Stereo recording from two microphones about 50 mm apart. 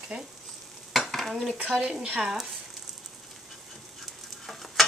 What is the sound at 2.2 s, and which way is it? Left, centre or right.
Speech, centre.